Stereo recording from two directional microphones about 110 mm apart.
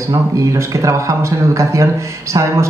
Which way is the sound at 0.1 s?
30° right (ahead or behind).